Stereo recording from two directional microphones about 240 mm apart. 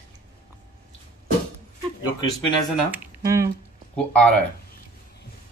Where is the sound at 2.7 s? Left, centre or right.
Centre.